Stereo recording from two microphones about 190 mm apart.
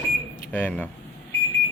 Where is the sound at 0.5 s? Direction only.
10° left (ahead or behind).